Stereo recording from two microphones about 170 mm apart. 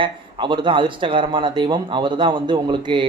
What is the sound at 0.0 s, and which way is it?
Speech, 30° right (ahead or behind).